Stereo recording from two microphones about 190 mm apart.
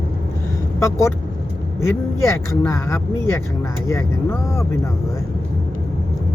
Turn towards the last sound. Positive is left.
turn(degrees=15)  # may be behind; listen again after turning